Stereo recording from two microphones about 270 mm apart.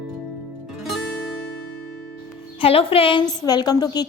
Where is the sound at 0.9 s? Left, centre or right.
Centre.